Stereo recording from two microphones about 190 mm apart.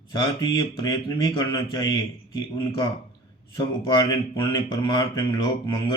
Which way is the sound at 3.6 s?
20° left (ahead or behind).